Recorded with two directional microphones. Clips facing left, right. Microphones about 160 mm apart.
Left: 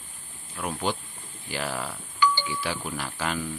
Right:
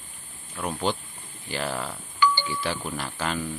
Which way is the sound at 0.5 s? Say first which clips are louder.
Right 2 dB; 5° left (ahead or behind).